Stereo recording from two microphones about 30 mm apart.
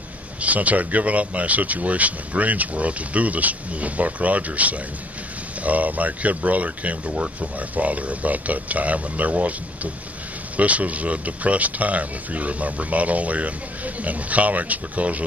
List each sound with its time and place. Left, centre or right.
0.4 s speech: right
10.6 s speech: right